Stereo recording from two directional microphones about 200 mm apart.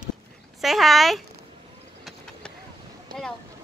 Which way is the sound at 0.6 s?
Centre (ahead or behind).